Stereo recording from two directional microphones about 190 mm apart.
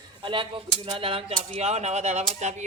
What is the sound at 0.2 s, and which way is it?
Speech, 25° right (ahead or behind).